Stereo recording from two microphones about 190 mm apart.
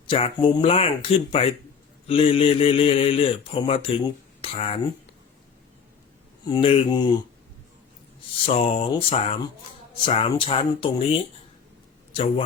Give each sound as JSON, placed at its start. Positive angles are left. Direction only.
{"t": 0.1, "sound": "speech", "side_deg": 30}
{"t": 6.4, "sound": "speech", "side_deg": 25}
{"t": 8.4, "sound": "speech", "side_deg": 30}